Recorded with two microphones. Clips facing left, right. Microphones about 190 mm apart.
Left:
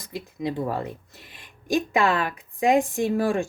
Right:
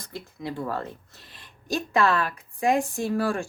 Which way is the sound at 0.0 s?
15° left (ahead or behind).